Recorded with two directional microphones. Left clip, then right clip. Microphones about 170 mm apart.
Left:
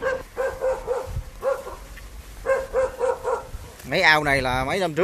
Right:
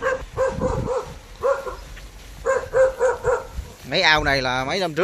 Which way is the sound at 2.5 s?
60° left (ahead or behind).